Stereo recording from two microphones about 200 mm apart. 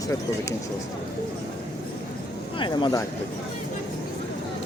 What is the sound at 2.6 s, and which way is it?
Speech, 25° left (ahead or behind).